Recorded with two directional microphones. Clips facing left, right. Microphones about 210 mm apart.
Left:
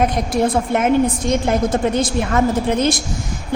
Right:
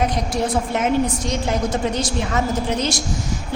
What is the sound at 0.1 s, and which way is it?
A woman's voice, 55° left (ahead or behind).